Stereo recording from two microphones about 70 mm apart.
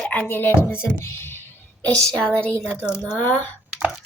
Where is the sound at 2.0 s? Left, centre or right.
Centre.